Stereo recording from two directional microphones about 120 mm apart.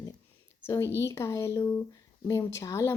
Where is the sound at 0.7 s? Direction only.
25° left (ahead or behind).